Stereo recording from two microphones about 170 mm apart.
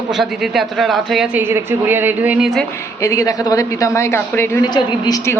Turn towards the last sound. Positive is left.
turn(degrees=20)  # may be behind; listen again after turning